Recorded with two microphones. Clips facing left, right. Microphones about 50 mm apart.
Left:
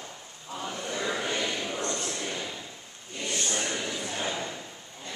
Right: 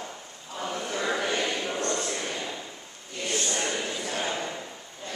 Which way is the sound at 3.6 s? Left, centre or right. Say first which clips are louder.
Right 2 dB; centre.